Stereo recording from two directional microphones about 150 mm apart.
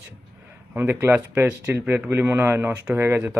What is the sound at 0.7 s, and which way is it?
Speech, 15° right (ahead or behind).